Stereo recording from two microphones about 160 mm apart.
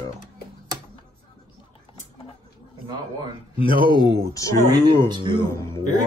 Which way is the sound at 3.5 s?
30° left (ahead or behind).